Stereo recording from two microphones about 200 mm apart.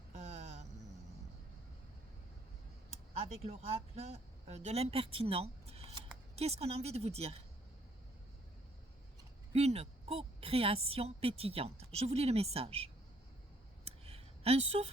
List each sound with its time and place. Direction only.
0.1 s vehicle: 35° right (ahead or behind)
3.2 s speech: 35° right (ahead or behind)
9.5 s a woman's voice: 30° right (ahead or behind)
13.8 s a sound: 30° right (ahead or behind)